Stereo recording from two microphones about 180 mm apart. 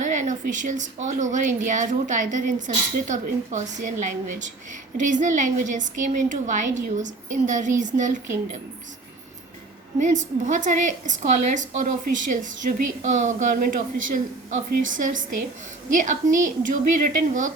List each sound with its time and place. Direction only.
0.0 s a woman's voice: 45° right (ahead or behind)
10.0 s a woman's voice: 45° right (ahead or behind)